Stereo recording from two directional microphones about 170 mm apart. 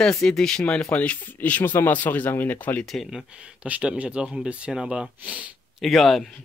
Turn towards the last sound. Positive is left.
turn(degrees=0)  # may be behind; listen again after turning